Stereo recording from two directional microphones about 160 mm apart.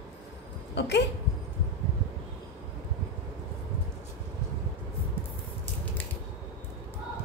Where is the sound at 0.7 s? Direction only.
90° left.